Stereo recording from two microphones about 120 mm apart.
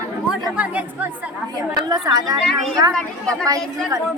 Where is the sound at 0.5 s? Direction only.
10° right (ahead or behind).